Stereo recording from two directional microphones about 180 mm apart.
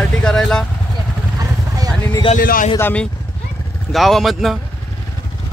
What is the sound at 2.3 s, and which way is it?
Speech, 50° left (ahead or behind).